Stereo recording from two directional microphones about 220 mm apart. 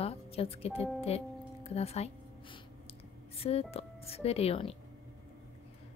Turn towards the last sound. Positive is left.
turn(degrees=25)  # may be behind; listen again after turning